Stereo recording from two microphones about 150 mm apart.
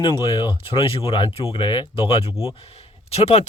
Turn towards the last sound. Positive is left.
turn(degrees=45)  # may be behind; listen again after turning